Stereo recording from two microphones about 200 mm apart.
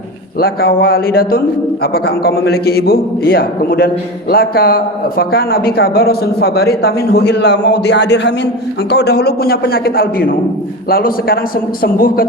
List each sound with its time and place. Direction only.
0.3 s a man's voice: 50° left (ahead or behind)